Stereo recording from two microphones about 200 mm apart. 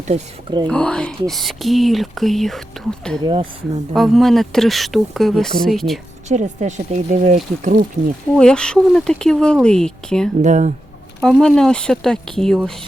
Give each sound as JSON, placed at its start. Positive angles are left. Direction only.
{"t": 0.1, "sound": "speech", "side_deg": -20}
{"t": 0.7, "sound": "speech", "side_deg": 5}
{"t": 6.2, "sound": "speech", "side_deg": -35}
{"t": 8.4, "sound": "speech", "side_deg": 5}
{"t": 10.4, "sound": "speech", "side_deg": -35}
{"t": 11.2, "sound": "speech", "side_deg": 5}